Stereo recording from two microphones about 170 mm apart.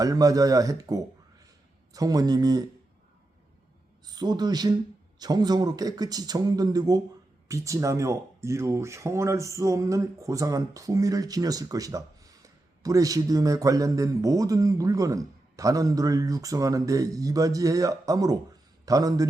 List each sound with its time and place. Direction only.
0.0 s speech: 20° right (ahead or behind)
4.0 s speech: 25° right (ahead or behind)